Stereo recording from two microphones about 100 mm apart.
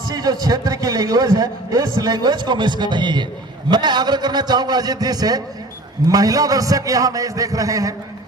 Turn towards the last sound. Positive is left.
turn(degrees=-35)  # may be behind; listen again after turning